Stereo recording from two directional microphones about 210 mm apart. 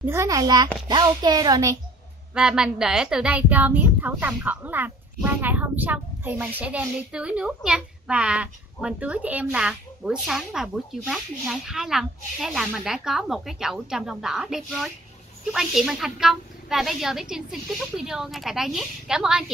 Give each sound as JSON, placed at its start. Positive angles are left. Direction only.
{"t": 0.0, "sound": "a child's voice", "side_deg": -15}
{"t": 2.3, "sound": "a woman's voice", "side_deg": -5}